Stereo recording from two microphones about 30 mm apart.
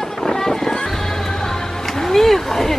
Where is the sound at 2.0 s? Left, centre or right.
Centre.